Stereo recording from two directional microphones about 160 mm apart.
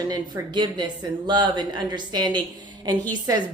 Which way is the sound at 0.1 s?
30° right (ahead or behind).